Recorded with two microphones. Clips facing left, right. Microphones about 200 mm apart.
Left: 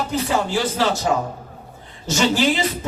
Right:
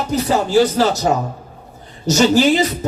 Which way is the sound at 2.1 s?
40° right (ahead or behind).